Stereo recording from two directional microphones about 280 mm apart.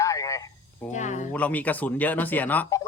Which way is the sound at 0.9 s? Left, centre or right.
Left.